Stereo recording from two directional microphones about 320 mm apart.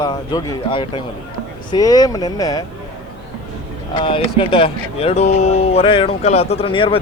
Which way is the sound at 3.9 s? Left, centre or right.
Centre.